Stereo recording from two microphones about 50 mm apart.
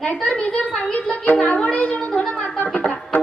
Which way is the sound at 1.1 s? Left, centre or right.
Left.